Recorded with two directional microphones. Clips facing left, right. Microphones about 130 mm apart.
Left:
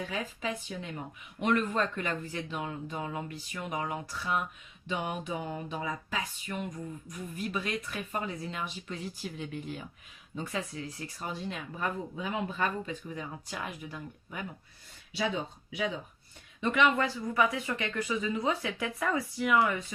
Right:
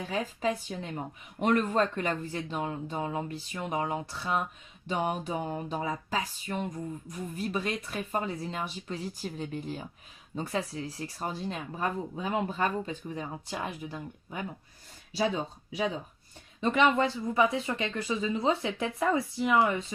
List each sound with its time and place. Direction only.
0.1 s speech: 35° right (ahead or behind)
16.6 s speech: 30° right (ahead or behind)